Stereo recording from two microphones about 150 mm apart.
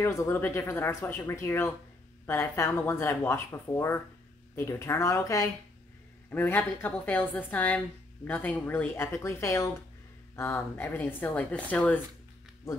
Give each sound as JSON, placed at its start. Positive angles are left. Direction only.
{"t": 0.0, "sound": "speech", "side_deg": 20}